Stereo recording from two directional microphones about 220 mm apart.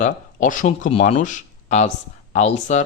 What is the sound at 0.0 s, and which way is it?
A man's voice, 35° left (ahead or behind).